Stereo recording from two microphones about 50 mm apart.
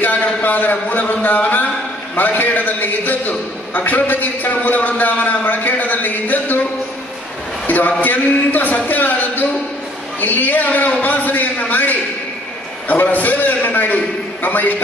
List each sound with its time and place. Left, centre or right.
0.0 s a man's voice: left
7.6 s a sound: left
8.0 s a man's voice: left